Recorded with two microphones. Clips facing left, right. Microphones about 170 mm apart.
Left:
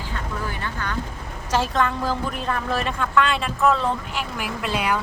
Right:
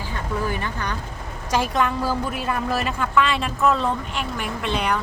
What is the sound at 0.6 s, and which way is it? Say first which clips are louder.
Vehicle: right 1 dB; 15° right (ahead or behind).